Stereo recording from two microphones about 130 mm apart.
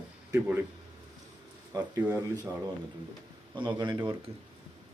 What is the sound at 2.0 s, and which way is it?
Speech, 10° right (ahead or behind).